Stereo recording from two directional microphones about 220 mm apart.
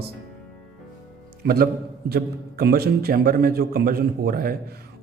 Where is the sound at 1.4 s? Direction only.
45° right (ahead or behind).